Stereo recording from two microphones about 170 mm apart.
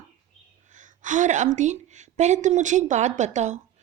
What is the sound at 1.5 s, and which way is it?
A woman's voice, 45° right (ahead or behind).